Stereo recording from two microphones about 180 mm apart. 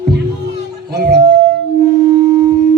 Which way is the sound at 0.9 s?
65° right (ahead or behind).